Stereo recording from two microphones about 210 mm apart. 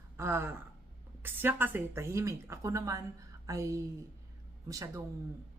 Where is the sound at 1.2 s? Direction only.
10° right (ahead or behind).